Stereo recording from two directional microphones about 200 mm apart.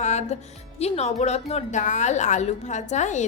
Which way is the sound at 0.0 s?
35° left (ahead or behind).